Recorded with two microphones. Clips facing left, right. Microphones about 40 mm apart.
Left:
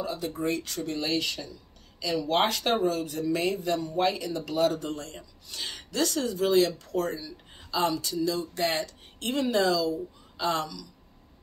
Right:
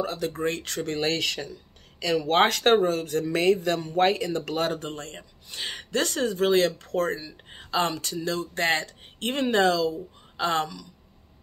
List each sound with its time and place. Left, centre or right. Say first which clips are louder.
0.0 s speech: right 3 dB; right